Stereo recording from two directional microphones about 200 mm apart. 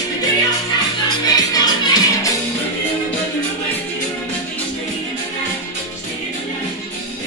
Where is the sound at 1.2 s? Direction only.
20° left (ahead or behind).